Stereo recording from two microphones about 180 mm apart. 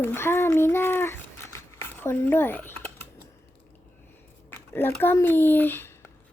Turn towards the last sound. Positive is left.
turn(degrees=10)  # may be behind; listen again after turning